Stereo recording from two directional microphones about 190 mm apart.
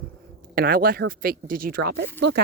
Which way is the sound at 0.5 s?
50° right (ahead or behind).